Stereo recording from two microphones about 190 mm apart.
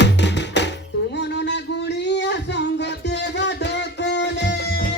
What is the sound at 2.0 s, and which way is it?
Music, 65° left (ahead or behind).